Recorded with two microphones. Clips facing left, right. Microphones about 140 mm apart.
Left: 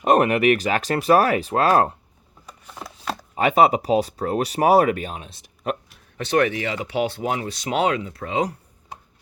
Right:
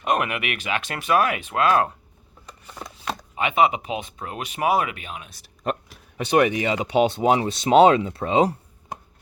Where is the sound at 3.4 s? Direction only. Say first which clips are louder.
Left 4 dB; 40° left (ahead or behind).